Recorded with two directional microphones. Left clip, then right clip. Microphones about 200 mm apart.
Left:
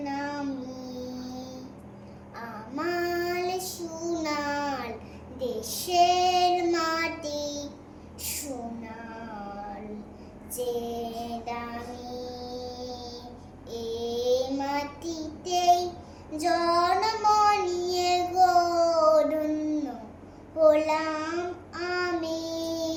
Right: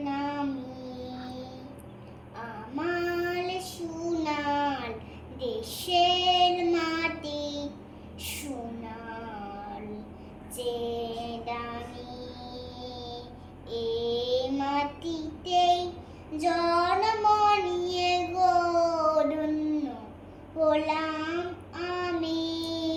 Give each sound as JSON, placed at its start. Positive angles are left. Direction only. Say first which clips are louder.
{"t": 0.0, "sound": "child singing", "louder": "right 1 dB", "side_deg": 20}
{"t": 2.7, "sound": "child singing", "louder": "left 1 dB", "side_deg": 20}
{"t": 10.6, "sound": "child singing", "louder": "left 1 dB", "side_deg": 20}
{"t": 11.7, "sound": "music", "louder": "left 2 dB", "side_deg": 20}
{"t": 13.7, "sound": "child singing", "louder": "right 3 dB", "side_deg": 15}